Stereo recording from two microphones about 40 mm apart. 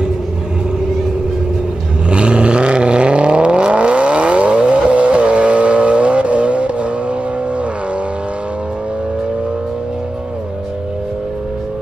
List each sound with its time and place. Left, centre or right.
2.0 s vehicle: right